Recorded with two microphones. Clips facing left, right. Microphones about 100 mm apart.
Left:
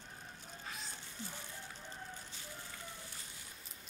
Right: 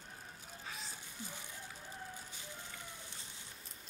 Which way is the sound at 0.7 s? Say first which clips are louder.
Even; centre (ahead or behind).